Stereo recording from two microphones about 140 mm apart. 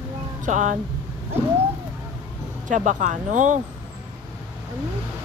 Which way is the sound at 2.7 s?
65° right (ahead or behind).